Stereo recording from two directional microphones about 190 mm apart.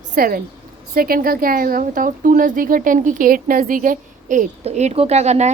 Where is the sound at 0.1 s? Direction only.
50° right (ahead or behind).